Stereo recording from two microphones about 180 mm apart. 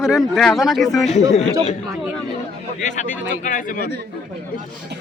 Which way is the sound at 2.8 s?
45° left (ahead or behind).